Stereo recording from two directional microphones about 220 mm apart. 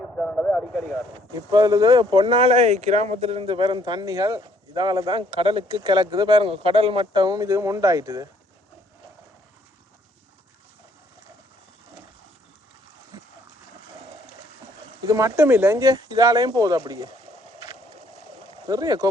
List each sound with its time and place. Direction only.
0.0 s speech: 5° left (ahead or behind)
1.5 s speech: 15° right (ahead or behind)
13.5 s boat: 45° left (ahead or behind)
15.0 s speech: 15° right (ahead or behind)
18.7 s speech: 15° right (ahead or behind)